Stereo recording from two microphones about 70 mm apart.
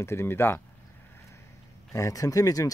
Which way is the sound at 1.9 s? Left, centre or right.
Left.